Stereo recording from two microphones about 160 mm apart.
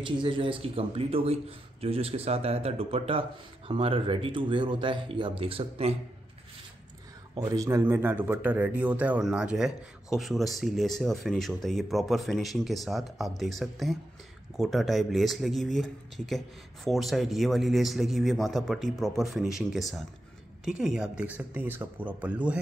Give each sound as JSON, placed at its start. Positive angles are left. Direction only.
{"t": 0.0, "sound": "a man's voice", "side_deg": -30}
{"t": 7.3, "sound": "a man's voice", "side_deg": -20}